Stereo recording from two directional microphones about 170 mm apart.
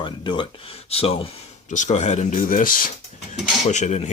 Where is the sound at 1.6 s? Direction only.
45° left (ahead or behind).